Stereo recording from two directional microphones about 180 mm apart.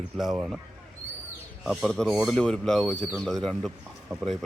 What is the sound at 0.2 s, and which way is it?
Speech, 5° right (ahead or behind).